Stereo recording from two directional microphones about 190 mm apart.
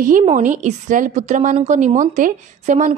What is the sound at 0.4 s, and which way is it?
A woman's voice, 40° right (ahead or behind).